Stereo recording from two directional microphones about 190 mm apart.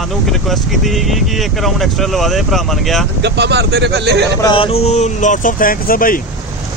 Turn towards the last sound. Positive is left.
turn(degrees=50)  # may be behind; listen again after turning